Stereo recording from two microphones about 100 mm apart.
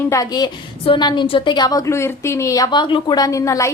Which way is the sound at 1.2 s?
60° left (ahead or behind).